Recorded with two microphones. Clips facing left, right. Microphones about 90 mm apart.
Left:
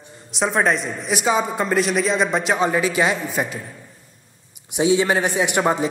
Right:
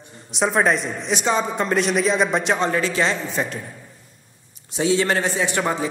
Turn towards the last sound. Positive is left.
turn(degrees=20)  # may be behind; listen again after turning